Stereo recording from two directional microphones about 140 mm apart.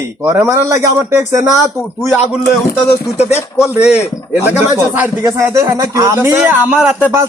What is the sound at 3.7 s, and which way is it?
A man's voice, 15° right (ahead or behind).